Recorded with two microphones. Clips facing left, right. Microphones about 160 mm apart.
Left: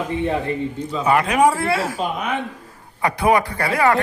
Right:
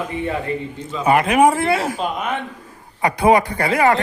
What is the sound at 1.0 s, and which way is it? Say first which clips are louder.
Speech: right 2 dB; 20° right (ahead or behind).